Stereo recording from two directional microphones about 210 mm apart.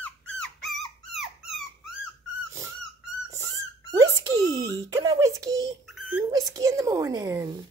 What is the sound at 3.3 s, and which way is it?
Dog, 15° right (ahead or behind).